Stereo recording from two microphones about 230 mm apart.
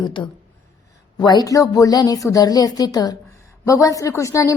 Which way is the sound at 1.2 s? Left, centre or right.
Centre.